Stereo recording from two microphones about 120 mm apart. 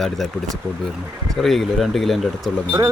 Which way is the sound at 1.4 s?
Centre (ahead or behind).